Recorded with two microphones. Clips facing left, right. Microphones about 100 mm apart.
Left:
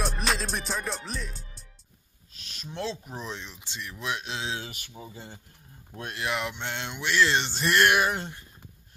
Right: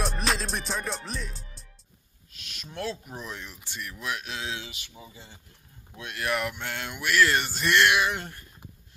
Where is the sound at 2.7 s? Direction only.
25° left (ahead or behind).